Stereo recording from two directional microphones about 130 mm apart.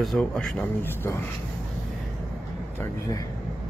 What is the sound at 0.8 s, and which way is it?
Speech, 20° left (ahead or behind).